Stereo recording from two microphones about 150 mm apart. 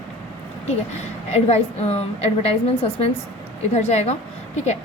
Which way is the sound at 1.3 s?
45° left (ahead or behind).